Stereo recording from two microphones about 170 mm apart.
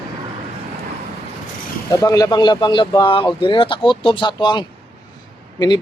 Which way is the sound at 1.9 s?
20° left (ahead or behind).